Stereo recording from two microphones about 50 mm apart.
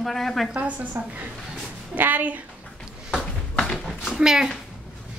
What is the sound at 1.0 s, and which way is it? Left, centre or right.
A woman's voice, right.